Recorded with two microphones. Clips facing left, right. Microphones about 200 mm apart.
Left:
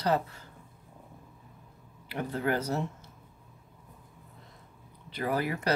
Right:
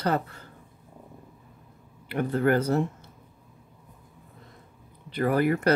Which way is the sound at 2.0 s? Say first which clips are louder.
Right 7 dB; 55° right (ahead or behind).